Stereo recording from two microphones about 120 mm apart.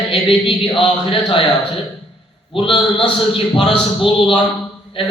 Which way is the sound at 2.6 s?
45° left (ahead or behind).